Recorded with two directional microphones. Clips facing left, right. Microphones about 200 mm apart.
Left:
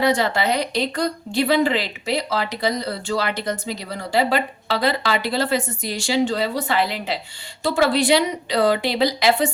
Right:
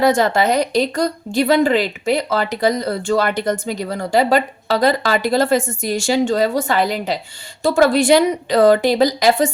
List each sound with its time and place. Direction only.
0.0 s a woman's voice: 45° right (ahead or behind)